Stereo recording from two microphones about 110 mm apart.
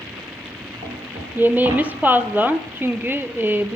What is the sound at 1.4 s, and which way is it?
Speech, 15° right (ahead or behind).